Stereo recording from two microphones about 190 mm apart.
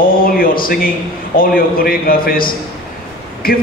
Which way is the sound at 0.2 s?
50° left (ahead or behind).